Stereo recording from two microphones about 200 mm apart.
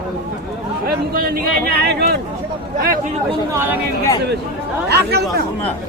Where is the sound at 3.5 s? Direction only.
15° right (ahead or behind).